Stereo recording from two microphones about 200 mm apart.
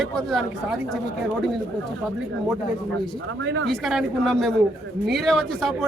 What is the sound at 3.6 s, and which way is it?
A man's voice, centre (ahead or behind).